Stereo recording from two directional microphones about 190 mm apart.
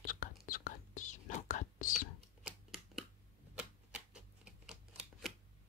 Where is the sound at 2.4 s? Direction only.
Centre (ahead or behind).